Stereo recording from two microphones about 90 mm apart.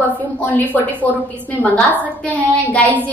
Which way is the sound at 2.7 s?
15° left (ahead or behind).